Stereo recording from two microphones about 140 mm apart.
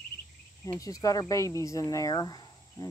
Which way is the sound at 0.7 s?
25° left (ahead or behind).